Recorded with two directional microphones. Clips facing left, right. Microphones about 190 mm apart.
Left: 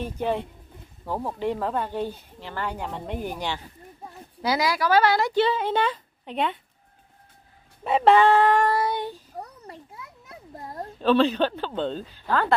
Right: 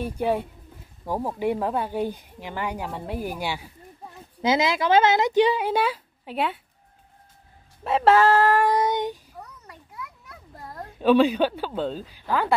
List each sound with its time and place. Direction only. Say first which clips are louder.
0.0 s speech: right 2 dB; 10° right (ahead or behind)
4.4 s speech: right 2 dB; 20° right (ahead or behind); by 6.6 s 5° right (ahead or behind)
7.8 s speech: even; centre (ahead or behind)
8.7 s child singing: right 3 dB; 20° right (ahead or behind)
9.3 s a sound: left 5 dB; 35° left (ahead or behind)
11.0 s speech: right 2 dB; 10° right (ahead or behind)